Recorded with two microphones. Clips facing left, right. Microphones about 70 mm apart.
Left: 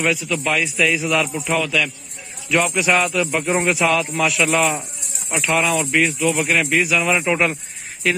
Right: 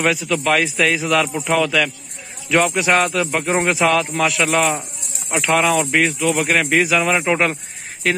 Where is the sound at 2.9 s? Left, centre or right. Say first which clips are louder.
Right 1 dB; right.